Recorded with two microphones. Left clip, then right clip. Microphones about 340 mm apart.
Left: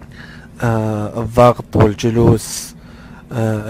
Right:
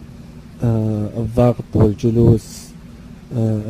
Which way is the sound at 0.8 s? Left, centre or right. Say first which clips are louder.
Left 3 dB; left.